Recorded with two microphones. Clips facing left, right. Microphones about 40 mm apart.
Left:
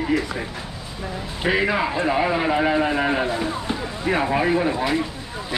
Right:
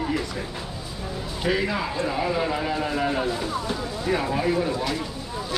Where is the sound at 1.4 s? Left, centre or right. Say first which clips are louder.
Left 4 dB; left.